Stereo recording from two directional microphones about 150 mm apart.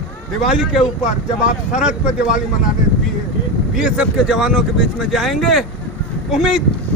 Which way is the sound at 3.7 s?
5° right (ahead or behind).